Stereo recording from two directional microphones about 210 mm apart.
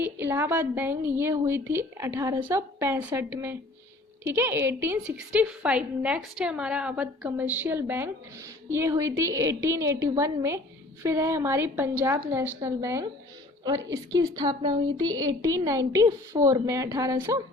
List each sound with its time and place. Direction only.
0.0 s a woman's voice: 10° right (ahead or behind)